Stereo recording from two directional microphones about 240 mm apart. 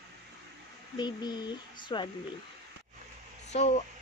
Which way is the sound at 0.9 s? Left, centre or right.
Centre.